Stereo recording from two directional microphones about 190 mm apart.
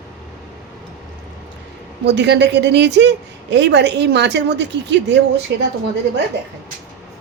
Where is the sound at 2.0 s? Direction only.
65° right (ahead or behind).